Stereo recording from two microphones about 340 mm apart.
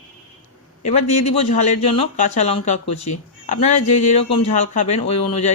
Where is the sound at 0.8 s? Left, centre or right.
Centre.